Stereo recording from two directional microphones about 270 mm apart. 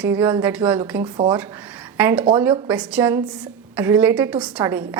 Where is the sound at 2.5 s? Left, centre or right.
Centre.